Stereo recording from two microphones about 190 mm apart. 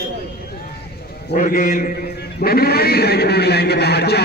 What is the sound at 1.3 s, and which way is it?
Speech, 45° left (ahead or behind).